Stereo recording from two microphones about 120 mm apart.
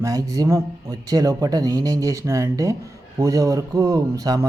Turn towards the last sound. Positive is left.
turn(degrees=-30)  # may be behind; listen again after turning